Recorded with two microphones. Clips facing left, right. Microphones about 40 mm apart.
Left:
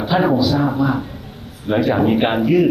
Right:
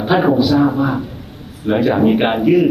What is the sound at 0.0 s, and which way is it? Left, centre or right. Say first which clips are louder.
Speech: right 2 dB; right.